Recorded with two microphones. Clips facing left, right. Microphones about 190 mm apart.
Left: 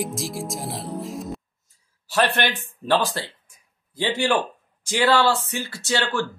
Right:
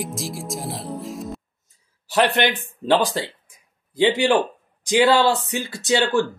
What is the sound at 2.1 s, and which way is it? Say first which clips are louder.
Speech: right 3 dB; 20° right (ahead or behind).